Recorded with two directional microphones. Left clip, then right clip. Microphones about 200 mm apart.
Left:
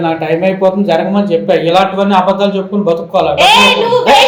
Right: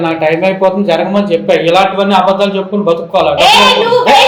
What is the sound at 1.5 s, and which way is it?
Speech, 30° left (ahead or behind).